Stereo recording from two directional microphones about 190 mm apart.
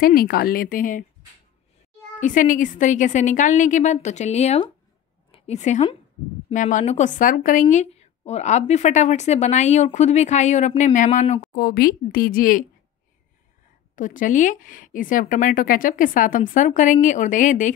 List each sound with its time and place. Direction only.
0.0 s a woman's voice: 50° left (ahead or behind)
2.1 s a woman's voice: 40° left (ahead or behind)
11.5 s a woman's voice: 50° left (ahead or behind)
13.9 s a woman's voice: 45° left (ahead or behind)